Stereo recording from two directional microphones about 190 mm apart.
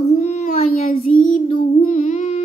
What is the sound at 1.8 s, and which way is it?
Music, 40° left (ahead or behind).